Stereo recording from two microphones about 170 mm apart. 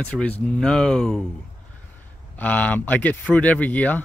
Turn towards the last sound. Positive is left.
turn(degrees=10)  # may be behind; listen again after turning